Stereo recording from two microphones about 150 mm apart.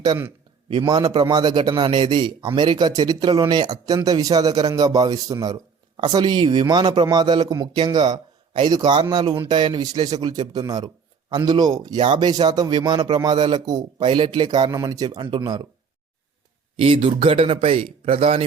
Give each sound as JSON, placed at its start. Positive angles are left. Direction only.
{"t": 0.7, "sound": "speech", "side_deg": -30}
{"t": 16.7, "sound": "a man's voice", "side_deg": -35}